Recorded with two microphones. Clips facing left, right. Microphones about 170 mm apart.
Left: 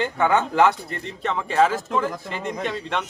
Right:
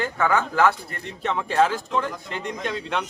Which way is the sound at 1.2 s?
Centre (ahead or behind).